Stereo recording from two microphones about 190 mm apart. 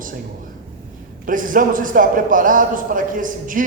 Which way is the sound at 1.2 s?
45° right (ahead or behind).